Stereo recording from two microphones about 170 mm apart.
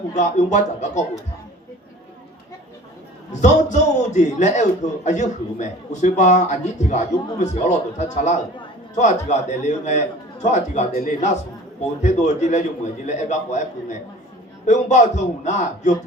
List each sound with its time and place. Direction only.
0.1 s a man's voice: 45° left (ahead or behind)
3.4 s a man's voice: 45° left (ahead or behind)